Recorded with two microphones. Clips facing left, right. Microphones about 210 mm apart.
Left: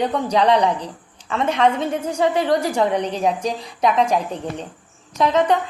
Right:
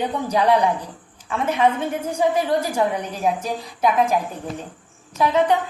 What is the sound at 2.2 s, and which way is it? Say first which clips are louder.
Speech: left 1 dB; 75° left (ahead or behind).